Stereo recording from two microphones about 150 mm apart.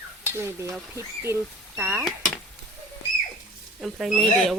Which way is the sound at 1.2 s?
15° right (ahead or behind).